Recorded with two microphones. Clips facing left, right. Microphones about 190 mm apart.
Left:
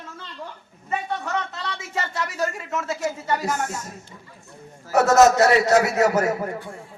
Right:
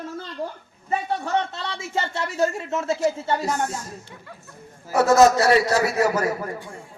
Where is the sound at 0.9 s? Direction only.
35° right (ahead or behind).